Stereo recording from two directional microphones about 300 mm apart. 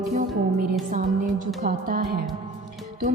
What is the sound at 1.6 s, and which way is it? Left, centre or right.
Speech, right.